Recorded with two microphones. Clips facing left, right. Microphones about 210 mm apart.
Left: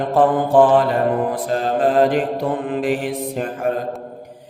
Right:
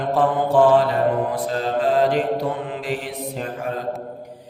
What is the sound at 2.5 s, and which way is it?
Mantra, 50° left (ahead or behind).